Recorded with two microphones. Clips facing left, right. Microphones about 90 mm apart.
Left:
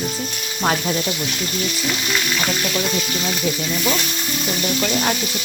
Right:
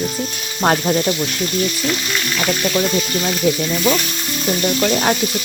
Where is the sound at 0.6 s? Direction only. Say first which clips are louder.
Right 5 dB; 45° right (ahead or behind).